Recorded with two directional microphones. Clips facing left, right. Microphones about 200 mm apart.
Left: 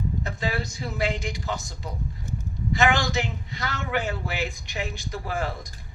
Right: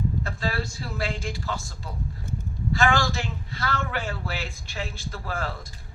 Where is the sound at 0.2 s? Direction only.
20° left (ahead or behind).